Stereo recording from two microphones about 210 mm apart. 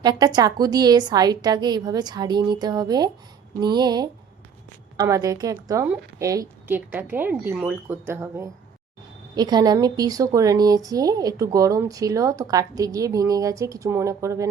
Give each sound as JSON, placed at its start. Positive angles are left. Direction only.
{"t": 0.0, "sound": "a woman's voice", "side_deg": -20}